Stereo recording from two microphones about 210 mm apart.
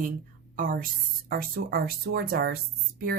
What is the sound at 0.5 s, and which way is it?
A woman's voice, 40° right (ahead or behind).